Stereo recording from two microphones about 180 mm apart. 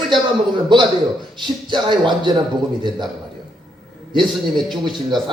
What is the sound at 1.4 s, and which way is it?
Speech, 25° right (ahead or behind).